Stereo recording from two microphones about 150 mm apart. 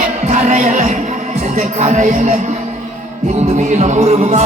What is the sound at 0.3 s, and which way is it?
Music, 55° right (ahead or behind).